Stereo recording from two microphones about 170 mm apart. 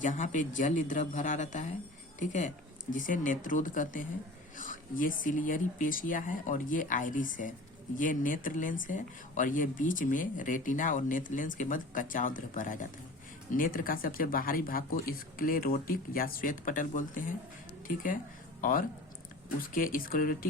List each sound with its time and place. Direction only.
0.0 s speech: 50° left (ahead or behind)